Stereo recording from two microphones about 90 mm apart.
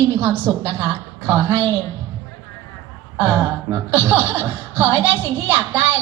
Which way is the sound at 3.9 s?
20° right (ahead or behind).